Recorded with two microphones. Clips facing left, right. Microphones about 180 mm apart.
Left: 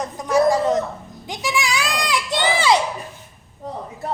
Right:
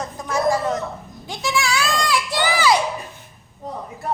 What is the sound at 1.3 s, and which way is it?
Goat, 15° left (ahead or behind).